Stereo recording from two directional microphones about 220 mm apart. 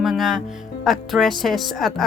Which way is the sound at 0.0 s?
Centre (ahead or behind).